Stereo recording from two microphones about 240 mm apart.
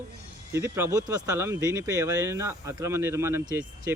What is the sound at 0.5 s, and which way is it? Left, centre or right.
Speech, centre.